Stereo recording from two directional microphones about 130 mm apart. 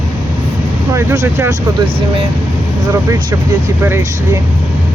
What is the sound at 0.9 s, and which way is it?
Speech, 20° right (ahead or behind).